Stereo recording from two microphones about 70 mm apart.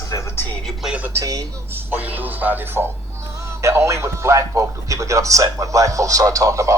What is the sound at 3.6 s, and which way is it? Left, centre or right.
A man's voice, right.